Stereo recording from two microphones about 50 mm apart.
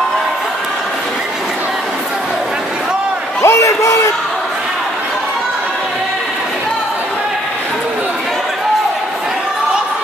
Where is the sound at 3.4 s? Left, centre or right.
Left.